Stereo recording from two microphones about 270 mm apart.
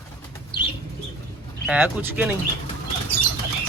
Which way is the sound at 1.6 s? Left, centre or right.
Centre.